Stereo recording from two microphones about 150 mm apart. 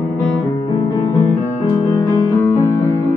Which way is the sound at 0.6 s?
25° left (ahead or behind).